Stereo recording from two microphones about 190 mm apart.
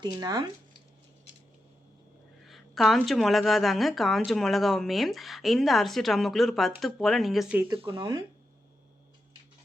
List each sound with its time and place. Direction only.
0.0 s speech: 20° right (ahead or behind)
2.5 s a woman's voice: centre (ahead or behind)
7.7 s speech: 25° right (ahead or behind)